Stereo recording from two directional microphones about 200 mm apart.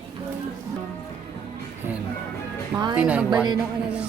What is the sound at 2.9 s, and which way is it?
Speech, 5° right (ahead or behind).